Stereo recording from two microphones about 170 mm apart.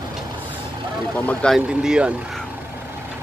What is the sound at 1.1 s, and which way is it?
Speech, 10° left (ahead or behind).